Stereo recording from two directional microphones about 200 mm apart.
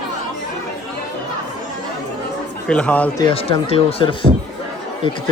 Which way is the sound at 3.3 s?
30° left (ahead or behind).